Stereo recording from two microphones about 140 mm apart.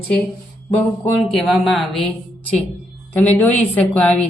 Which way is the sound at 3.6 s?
10° left (ahead or behind).